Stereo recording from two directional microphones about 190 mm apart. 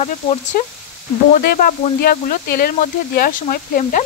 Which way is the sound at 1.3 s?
50° left (ahead or behind).